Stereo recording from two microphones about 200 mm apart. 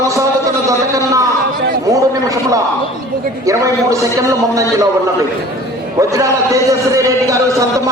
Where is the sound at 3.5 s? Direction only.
15° right (ahead or behind).